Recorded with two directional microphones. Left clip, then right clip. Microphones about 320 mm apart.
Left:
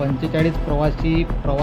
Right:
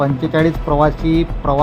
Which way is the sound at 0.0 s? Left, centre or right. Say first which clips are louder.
Right 5 dB; centre.